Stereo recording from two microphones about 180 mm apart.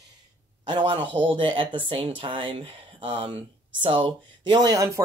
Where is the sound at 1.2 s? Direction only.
30° right (ahead or behind).